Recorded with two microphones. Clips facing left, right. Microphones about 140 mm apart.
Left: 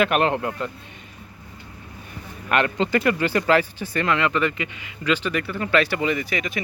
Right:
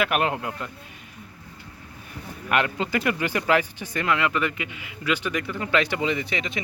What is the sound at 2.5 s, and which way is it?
Speech, 10° right (ahead or behind).